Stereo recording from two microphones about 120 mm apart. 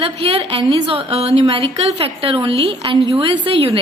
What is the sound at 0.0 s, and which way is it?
A woman's voice, 55° right (ahead or behind).